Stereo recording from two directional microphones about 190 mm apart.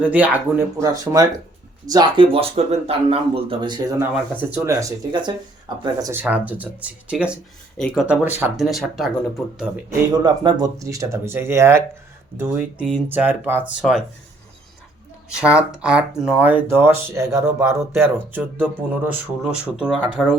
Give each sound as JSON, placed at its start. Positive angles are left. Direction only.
{"t": 0.0, "sound": "speech", "side_deg": -5}
{"t": 4.1, "sound": "speech", "side_deg": -10}
{"t": 10.1, "sound": "speech", "side_deg": -20}
{"t": 15.4, "sound": "speech", "side_deg": -5}